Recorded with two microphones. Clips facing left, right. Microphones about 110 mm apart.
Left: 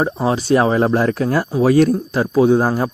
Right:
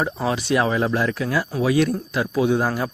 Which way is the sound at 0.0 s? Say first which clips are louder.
Left 5 dB; 30° left (ahead or behind).